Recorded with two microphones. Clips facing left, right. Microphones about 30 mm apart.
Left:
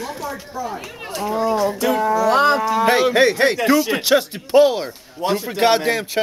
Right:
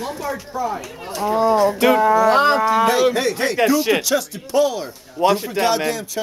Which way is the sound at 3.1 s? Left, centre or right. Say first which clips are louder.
Left 5 dB; left.